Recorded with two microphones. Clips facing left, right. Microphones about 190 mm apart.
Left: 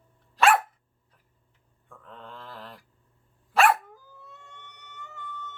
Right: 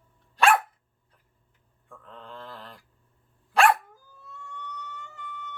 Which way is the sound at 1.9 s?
Centre (ahead or behind).